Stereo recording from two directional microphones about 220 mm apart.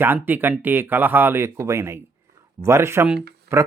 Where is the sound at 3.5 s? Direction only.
45° right (ahead or behind).